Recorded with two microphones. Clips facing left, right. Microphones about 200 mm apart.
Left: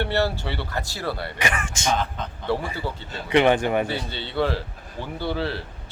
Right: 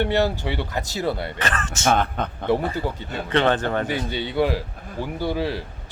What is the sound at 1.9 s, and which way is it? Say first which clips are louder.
Speech: right 4 dB; 60° right (ahead or behind).